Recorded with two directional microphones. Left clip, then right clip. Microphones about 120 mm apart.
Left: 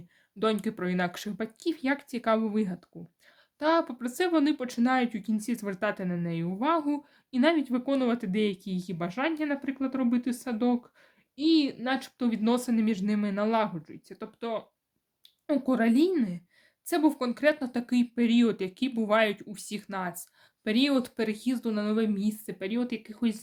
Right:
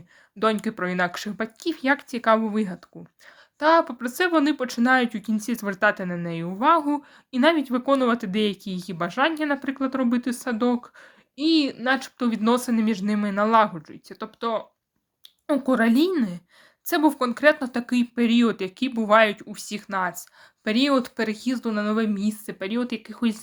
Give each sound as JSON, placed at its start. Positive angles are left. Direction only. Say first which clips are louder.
{"t": 0.3, "sound": "speech", "louder": "right 5 dB", "side_deg": 30}